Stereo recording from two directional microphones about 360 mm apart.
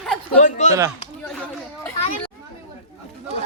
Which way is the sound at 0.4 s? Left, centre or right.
Centre.